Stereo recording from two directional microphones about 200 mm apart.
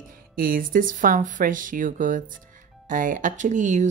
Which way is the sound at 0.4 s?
45° right (ahead or behind).